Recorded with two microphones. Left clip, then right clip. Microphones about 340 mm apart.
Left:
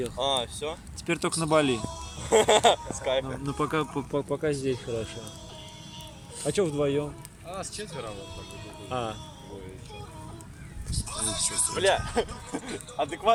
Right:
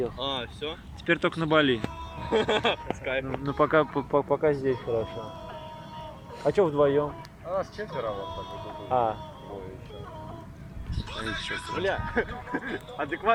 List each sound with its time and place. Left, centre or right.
0.2 s speech: centre
3.4 s speech: centre
4.3 s speech: centre
4.9 s speech: right
6.5 s speech: centre
7.5 s speech: centre
8.1 s speech: centre
11.3 s speech: centre
11.8 s speech: left
12.1 s speech: centre